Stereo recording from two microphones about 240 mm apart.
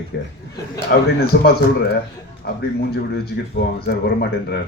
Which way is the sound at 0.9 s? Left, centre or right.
Left.